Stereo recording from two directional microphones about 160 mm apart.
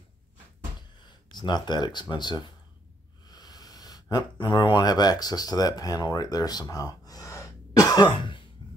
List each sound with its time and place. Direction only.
1.3 s speech: 25° left (ahead or behind)
6.7 s cough: 25° left (ahead or behind)
8.6 s a sound: 30° left (ahead or behind)